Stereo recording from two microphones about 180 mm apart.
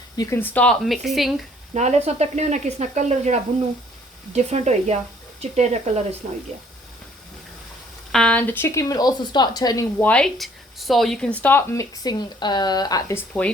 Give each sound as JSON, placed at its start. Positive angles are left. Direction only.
{"t": 0.2, "sound": "speech", "side_deg": 15}
{"t": 1.7, "sound": "speech", "side_deg": -40}
{"t": 8.1, "sound": "speech", "side_deg": 5}
{"t": 10.0, "sound": "speech", "side_deg": 5}